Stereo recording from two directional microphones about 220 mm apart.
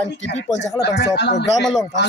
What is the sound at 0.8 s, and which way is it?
Speech, 50° left (ahead or behind).